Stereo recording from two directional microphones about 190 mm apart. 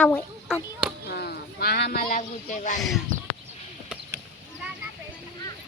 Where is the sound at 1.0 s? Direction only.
60° left (ahead or behind); by 2.7 s 40° left (ahead or behind).